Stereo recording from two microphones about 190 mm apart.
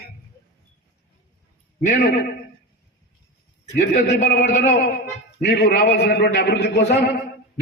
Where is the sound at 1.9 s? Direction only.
60° left (ahead or behind).